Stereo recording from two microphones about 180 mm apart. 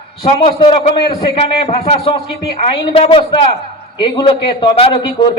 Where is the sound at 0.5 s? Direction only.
30° left (ahead or behind).